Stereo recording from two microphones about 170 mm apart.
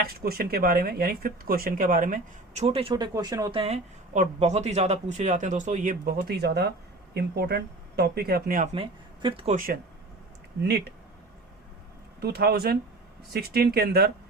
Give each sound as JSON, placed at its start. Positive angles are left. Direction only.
{"t": 0.0, "sound": "speech", "side_deg": -60}
{"t": 3.6, "sound": "speech", "side_deg": -40}
{"t": 8.6, "sound": "speech", "side_deg": -35}
{"t": 10.6, "sound": "speech", "side_deg": -70}
{"t": 12.2, "sound": "speech", "side_deg": -70}